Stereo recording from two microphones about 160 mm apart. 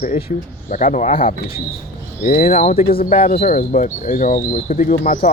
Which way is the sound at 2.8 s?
60° left (ahead or behind).